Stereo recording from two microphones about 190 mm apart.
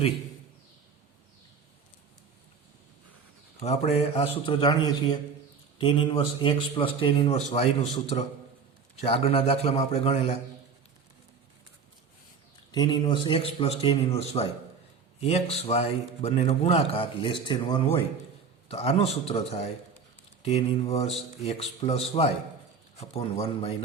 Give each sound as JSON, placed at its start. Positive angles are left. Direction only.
{"t": 3.6, "sound": "a man's voice", "side_deg": 30}
{"t": 12.7, "sound": "a man's voice", "side_deg": 25}